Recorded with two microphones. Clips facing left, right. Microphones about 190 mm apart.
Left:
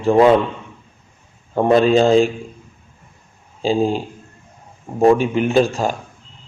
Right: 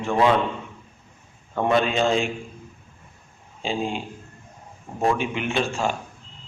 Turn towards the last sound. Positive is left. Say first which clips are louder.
# left 8 dB
turn(degrees=40)  # may be behind; listen again after turning